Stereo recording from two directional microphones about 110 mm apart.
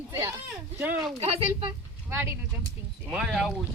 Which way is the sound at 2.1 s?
25° right (ahead or behind).